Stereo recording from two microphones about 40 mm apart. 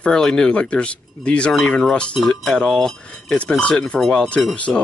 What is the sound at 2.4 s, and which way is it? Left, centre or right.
Cutlery, centre.